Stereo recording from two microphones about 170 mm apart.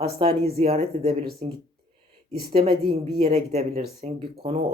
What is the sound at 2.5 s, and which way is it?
Speech, 35° right (ahead or behind).